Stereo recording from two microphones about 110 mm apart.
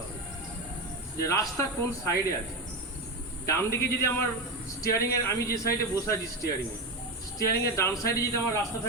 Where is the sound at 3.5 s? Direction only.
25° left (ahead or behind).